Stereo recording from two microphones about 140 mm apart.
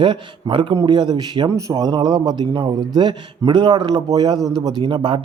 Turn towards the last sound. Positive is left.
turn(degrees=-35)  # may be behind; listen again after turning